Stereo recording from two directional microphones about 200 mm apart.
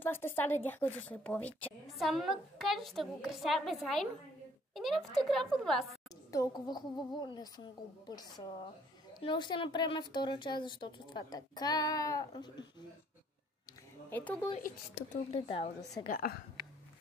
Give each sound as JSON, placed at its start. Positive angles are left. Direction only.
{"t": 0.0, "sound": "a woman's voice", "side_deg": 10}
{"t": 6.3, "sound": "a woman's voice", "side_deg": 20}
{"t": 14.1, "sound": "a woman's voice", "side_deg": 10}
{"t": 15.3, "sound": "a woman's voice", "side_deg": 30}
{"t": 16.1, "sound": "a woman's voice", "side_deg": 45}